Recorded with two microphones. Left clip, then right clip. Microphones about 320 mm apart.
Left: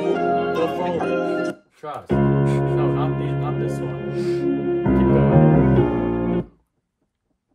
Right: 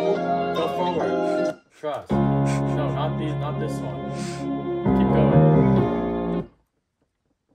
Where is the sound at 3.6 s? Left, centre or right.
Left.